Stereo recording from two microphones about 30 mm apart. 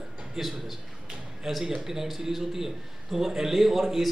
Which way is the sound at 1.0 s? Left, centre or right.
Right.